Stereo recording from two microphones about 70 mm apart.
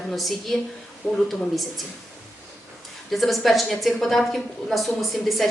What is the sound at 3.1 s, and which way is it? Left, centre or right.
Speech, centre.